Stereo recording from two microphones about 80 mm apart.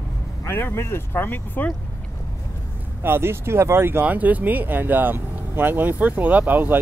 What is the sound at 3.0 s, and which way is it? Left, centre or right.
Speech, right.